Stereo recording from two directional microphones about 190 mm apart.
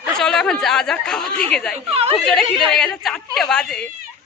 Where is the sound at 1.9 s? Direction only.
30° right (ahead or behind).